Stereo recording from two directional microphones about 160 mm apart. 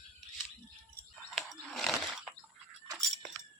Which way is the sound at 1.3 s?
Centre (ahead or behind).